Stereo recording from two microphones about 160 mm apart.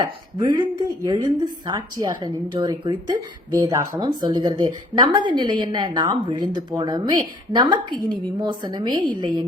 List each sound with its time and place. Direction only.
0.0 s a woman's voice: 25° right (ahead or behind)